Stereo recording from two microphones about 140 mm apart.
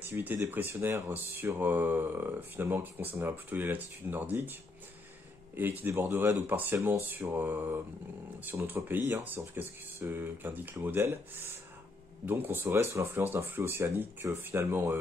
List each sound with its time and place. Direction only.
0.0 s speech: 15° right (ahead or behind)
5.6 s speech: 15° right (ahead or behind)